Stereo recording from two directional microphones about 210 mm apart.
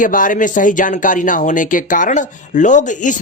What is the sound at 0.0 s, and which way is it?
Speech, 40° left (ahead or behind).